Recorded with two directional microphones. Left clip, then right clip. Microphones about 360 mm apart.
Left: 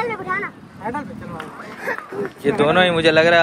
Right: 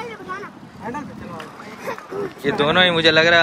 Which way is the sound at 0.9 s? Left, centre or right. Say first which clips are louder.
Left 3 dB; centre.